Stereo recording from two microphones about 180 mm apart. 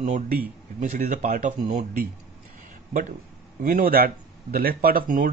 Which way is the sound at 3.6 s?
50° right (ahead or behind).